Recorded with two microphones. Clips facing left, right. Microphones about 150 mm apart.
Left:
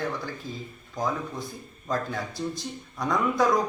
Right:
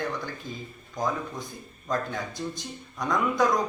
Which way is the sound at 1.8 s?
5° left (ahead or behind).